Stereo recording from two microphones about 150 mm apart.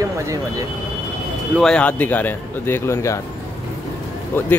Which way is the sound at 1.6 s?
5° left (ahead or behind).